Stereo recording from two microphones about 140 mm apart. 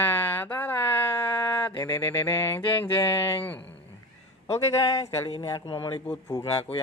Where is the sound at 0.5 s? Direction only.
15° left (ahead or behind).